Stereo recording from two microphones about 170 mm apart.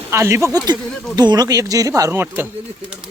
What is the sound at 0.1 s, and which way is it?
Speech, 15° right (ahead or behind).